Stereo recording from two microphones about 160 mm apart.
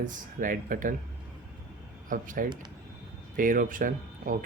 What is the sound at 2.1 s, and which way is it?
Speech, 60° right (ahead or behind).